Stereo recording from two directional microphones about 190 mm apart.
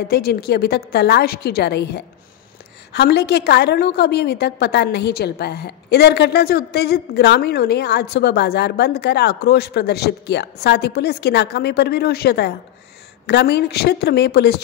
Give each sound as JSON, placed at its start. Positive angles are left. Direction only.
{"t": 0.1, "sound": "a woman's voice", "side_deg": 55}